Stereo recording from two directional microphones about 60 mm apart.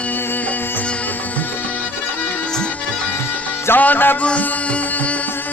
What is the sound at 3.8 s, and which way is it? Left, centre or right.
Music, left.